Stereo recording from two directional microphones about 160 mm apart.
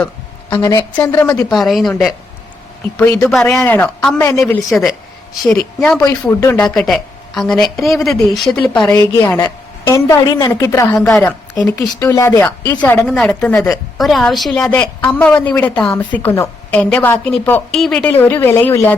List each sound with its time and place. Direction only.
0.6 s a woman's voice: 15° left (ahead or behind)
1.5 s a woman's voice: centre (ahead or behind)
3.2 s a woman's voice: 5° left (ahead or behind); by 4.5 s 20° left (ahead or behind)
4.7 s a woman's voice: centre (ahead or behind)
6.7 s a woman's voice: centre (ahead or behind)
9.0 s a woman's voice: 20° left (ahead or behind)
10.9 s a woman's voice: 5° left (ahead or behind)